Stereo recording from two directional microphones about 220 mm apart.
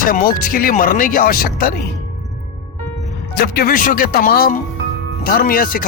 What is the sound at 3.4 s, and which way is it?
Speech, 40° left (ahead or behind).